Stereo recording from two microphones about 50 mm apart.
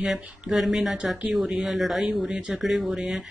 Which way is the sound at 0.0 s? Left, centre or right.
Centre.